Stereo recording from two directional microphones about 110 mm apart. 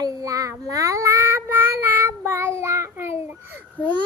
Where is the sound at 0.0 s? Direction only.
30° right (ahead or behind).